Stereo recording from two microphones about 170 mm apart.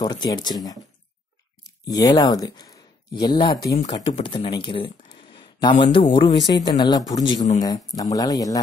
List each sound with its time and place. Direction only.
0.0 s speech: 25° left (ahead or behind)